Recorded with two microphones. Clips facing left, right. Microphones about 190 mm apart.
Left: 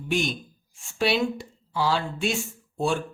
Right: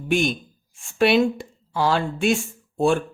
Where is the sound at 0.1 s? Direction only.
55° right (ahead or behind).